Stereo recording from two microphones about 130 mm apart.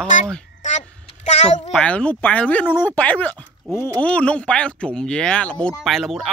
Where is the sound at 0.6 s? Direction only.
65° left (ahead or behind).